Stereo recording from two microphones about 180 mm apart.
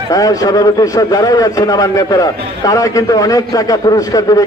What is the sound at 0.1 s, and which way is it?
A man's voice, 20° left (ahead or behind).